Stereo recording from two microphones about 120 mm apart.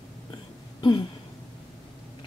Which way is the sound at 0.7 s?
40° left (ahead or behind).